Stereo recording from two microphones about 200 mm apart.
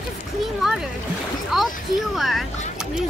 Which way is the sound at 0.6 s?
Centre (ahead or behind).